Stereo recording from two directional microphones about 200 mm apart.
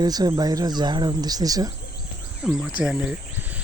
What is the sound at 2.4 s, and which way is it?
Speech, 5° right (ahead or behind).